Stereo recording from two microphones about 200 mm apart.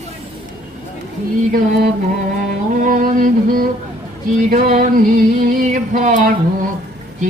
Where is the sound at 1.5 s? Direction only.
45° right (ahead or behind).